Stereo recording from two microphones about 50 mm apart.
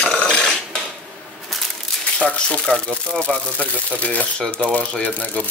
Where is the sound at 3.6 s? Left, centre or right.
Left.